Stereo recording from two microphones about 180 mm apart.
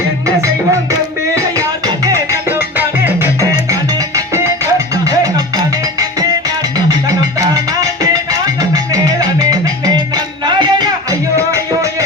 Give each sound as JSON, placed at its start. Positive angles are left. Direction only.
{"t": 2.0, "sound": "music", "side_deg": -15}
{"t": 7.3, "sound": "music", "side_deg": -20}